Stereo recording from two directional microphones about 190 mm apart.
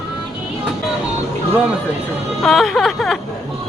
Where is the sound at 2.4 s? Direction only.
Centre (ahead or behind).